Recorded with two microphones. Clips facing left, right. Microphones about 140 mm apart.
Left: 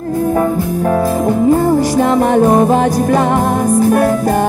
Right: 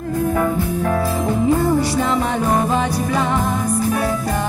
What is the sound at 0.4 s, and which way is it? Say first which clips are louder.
Music: left 5 dB; 40° left (ahead or behind).